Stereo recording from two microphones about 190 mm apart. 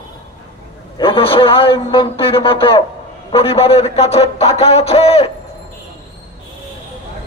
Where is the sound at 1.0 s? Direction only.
30° left (ahead or behind).